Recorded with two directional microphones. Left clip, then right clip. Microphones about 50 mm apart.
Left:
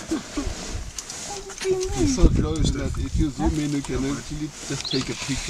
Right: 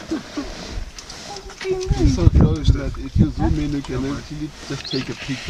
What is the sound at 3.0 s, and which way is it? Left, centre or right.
Speech, right.